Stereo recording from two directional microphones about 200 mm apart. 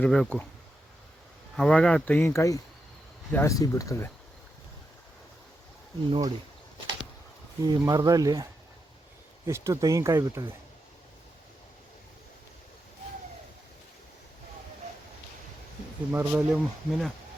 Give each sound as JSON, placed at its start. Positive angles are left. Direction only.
{"t": 0.0, "sound": "speech", "side_deg": 5}
{"t": 1.5, "sound": "speech", "side_deg": 5}
{"t": 6.1, "sound": "speech", "side_deg": -25}
{"t": 7.6, "sound": "speech", "side_deg": -20}
{"t": 9.5, "sound": "speech", "side_deg": -15}
{"t": 16.1, "sound": "speech", "side_deg": -5}